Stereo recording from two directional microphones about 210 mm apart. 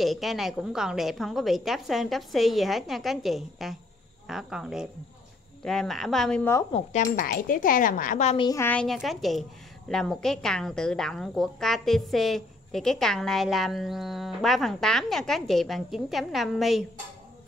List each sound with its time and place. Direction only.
0.0 s a woman's voice: centre (ahead or behind)
6.7 s speech: 35° left (ahead or behind)
8.5 s a woman's voice: 10° left (ahead or behind)